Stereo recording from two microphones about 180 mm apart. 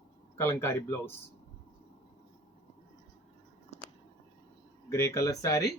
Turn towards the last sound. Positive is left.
turn(degrees=15)  # may be behind; listen again after turning